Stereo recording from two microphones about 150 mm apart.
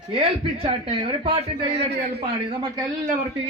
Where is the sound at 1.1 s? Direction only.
35° right (ahead or behind).